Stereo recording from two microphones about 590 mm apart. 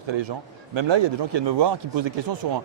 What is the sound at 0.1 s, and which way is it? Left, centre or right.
A man's voice, right.